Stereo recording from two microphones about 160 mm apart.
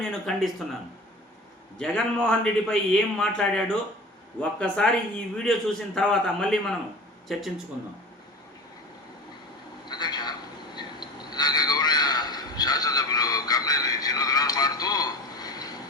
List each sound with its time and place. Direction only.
0.0 s a man's voice: 5° left (ahead or behind)
1.8 s a man's voice: 5° left (ahead or behind)
9.9 s a sound: 25° left (ahead or behind)